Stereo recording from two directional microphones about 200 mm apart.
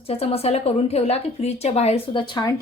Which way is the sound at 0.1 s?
30° left (ahead or behind).